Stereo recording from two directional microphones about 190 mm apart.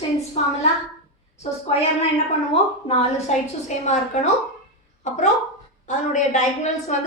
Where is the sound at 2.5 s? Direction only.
30° left (ahead or behind).